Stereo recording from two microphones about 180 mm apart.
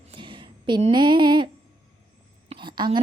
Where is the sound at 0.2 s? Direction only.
25° right (ahead or behind).